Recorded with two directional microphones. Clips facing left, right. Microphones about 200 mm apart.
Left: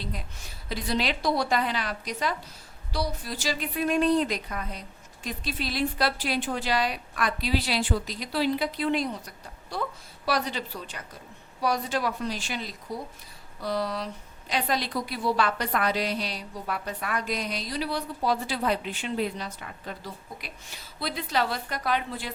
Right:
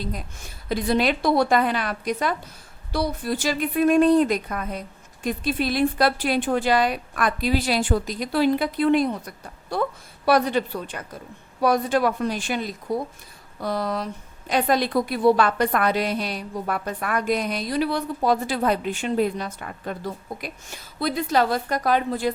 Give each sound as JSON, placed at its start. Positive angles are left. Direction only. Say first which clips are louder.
{"t": 0.0, "sound": "a woman's voice", "louder": "right 5 dB", "side_deg": -45}